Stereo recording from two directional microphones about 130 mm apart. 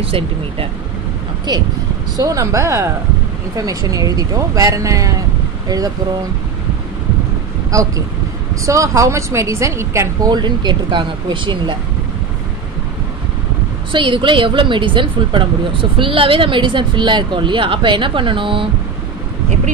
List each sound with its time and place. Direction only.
0.0 s speech: 45° right (ahead or behind)
1.5 s speech: 30° right (ahead or behind)
8.6 s speech: 25° right (ahead or behind)
10.3 s speech: 35° right (ahead or behind)
13.9 s speech: 40° right (ahead or behind)